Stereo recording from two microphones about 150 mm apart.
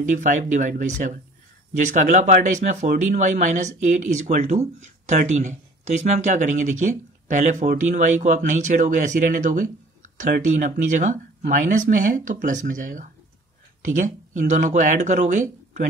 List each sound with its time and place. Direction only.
0.0 s speech: 55° right (ahead or behind)